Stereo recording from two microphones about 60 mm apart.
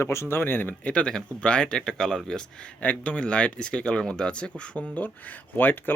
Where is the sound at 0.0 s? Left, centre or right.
Left.